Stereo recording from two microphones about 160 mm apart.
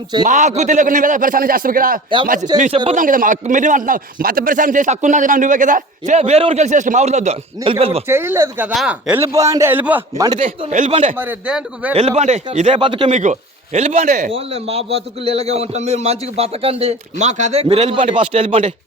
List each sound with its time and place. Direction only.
0.3 s a man's voice: 50° right (ahead or behind)
8.0 s speech: 15° right (ahead or behind)
9.2 s speech: 20° right (ahead or behind)
10.3 s a man's voice: 35° right (ahead or behind)
11.2 s speech: 10° right (ahead or behind)
11.9 s a man's voice: 45° right (ahead or behind)
12.7 s speech: 30° right (ahead or behind)
13.1 s a man's voice: 50° right (ahead or behind); by 18.7 s 35° right (ahead or behind)